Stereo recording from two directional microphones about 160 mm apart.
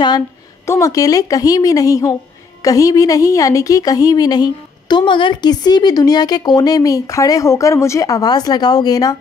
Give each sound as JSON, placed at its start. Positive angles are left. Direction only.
{"t": 0.7, "sound": "a woman's voice", "side_deg": 20}